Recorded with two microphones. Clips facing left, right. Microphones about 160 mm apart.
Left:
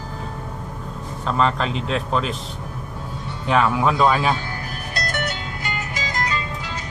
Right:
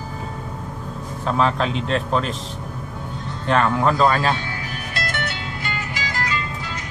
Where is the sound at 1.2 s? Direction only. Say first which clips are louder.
Right 1 dB; centre (ahead or behind).